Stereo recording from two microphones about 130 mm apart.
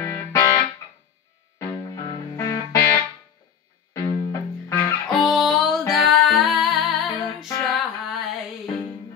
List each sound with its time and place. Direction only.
0.0 s music: 20° left (ahead or behind)
1.6 s music: 25° left (ahead or behind)
5.0 s music: centre (ahead or behind)
7.7 s a sound: centre (ahead or behind)